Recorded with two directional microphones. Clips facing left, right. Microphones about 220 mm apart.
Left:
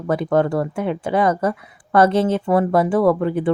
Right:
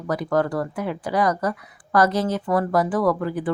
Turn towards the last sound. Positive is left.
turn(degrees=25)  # may be behind; listen again after turning